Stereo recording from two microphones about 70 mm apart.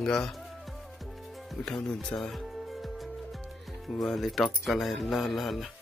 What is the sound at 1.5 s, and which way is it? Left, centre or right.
Speech, centre.